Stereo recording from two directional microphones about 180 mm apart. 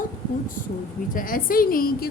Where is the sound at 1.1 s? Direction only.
50° left (ahead or behind).